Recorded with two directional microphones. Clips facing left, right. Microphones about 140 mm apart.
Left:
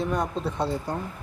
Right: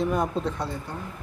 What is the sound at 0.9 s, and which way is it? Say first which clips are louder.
Speech: left 6 dB; 40° left (ahead or behind).